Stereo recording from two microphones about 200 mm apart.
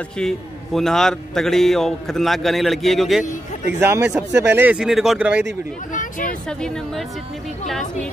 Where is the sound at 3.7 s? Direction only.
10° right (ahead or behind).